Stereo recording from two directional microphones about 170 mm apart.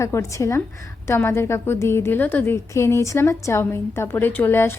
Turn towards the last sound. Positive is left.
turn(degrees=15)  # may be behind; listen again after turning